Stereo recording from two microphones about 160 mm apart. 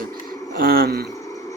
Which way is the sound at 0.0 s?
65° right (ahead or behind).